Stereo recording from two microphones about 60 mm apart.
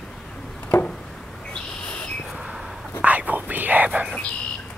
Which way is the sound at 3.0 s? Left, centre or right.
Right.